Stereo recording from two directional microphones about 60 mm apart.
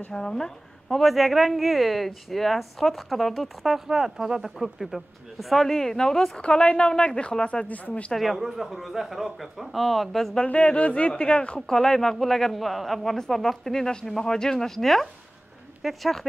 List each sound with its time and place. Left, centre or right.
0.1 s a woman's voice: centre
7.6 s speech: left
8.1 s a woman's voice: centre
10.3 s speech: centre
11.7 s a woman's voice: centre